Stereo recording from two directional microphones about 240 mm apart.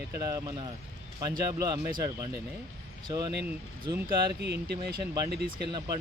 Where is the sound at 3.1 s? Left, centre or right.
Centre.